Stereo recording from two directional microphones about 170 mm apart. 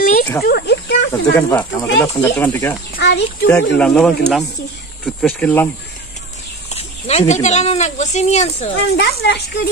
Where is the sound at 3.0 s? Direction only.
85° left.